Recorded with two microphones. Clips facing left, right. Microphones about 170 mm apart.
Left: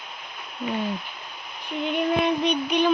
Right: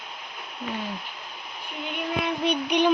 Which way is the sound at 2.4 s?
15° right (ahead or behind).